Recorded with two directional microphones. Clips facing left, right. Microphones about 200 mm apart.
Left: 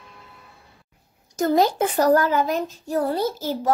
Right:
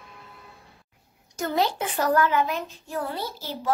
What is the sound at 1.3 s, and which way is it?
A child's voice, 40° left (ahead or behind).